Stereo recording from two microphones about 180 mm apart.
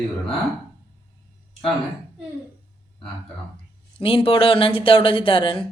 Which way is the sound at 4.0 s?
30° left (ahead or behind).